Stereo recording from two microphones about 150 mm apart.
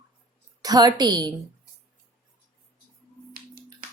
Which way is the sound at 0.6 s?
25° right (ahead or behind).